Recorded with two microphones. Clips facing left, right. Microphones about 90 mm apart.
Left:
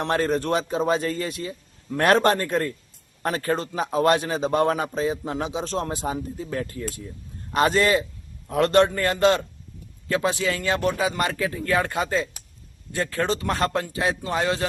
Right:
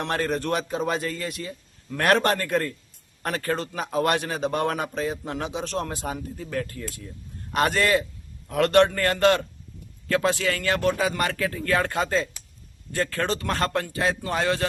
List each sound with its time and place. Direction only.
0.0 s a man's voice: 30° left (ahead or behind)